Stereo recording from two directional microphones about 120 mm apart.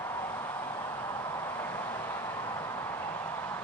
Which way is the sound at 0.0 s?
20° left (ahead or behind).